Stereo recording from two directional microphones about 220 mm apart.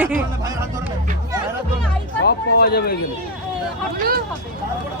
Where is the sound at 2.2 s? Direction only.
45° left (ahead or behind).